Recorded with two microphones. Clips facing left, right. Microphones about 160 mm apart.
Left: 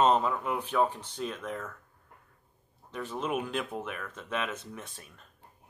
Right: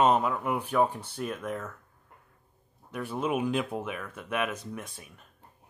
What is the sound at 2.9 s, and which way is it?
Speech, 10° right (ahead or behind).